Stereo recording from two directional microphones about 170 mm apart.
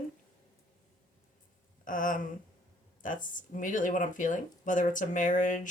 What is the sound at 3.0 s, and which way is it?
Speech, 50° left (ahead or behind).